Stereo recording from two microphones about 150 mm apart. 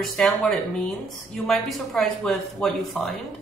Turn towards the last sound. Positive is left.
turn(degrees=0)  # may be behind; listen again after turning